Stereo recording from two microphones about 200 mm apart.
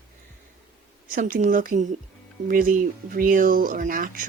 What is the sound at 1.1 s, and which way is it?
Speech, 45° right (ahead or behind).